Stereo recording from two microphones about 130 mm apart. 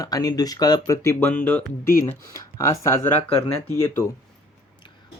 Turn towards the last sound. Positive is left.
turn(degrees=20)  # may be behind; listen again after turning